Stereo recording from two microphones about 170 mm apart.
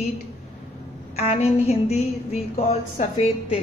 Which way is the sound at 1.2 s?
40° left (ahead or behind).